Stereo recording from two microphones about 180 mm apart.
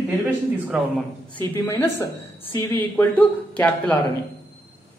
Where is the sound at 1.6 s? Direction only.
20° left (ahead or behind).